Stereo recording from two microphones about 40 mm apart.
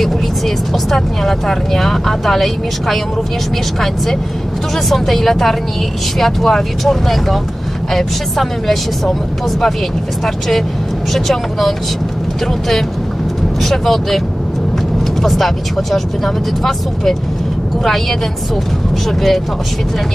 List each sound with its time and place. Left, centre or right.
0.8 s speech: centre
4.8 s speech: centre
11.1 s speech: centre
13.6 s speech: centre
15.2 s speech: centre
19.0 s speech: centre